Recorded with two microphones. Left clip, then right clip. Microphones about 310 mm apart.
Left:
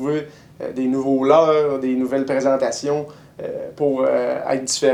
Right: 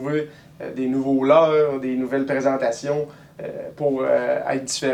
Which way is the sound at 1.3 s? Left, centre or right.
Right.